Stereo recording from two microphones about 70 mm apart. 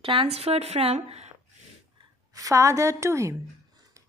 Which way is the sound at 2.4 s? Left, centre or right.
Right.